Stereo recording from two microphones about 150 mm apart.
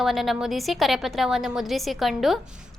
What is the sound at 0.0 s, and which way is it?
A woman's voice, centre (ahead or behind).